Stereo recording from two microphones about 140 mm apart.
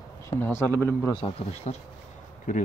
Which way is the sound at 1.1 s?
40° left (ahead or behind).